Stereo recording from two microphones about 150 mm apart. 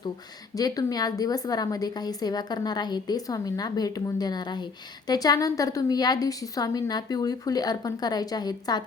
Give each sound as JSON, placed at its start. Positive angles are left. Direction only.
{"t": 0.5, "sound": "a woman's voice", "side_deg": 25}